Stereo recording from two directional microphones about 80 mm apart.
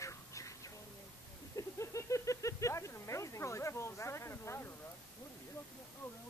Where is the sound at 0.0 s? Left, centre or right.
Left.